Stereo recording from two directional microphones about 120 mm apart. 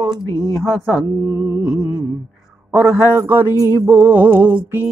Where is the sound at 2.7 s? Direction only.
10° right (ahead or behind).